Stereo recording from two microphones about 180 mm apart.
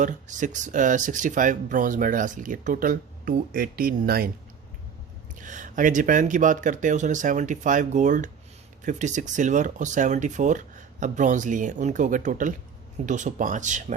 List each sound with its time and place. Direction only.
0.0 s speech: 45° right (ahead or behind)
5.3 s speech: 45° right (ahead or behind)